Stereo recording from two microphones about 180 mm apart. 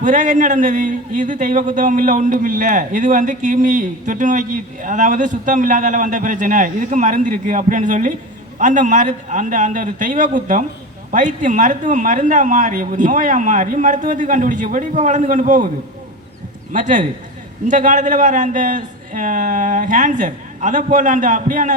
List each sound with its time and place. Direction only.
0.0 s a man's voice: 45° right (ahead or behind)
16.7 s a man's voice: 45° right (ahead or behind)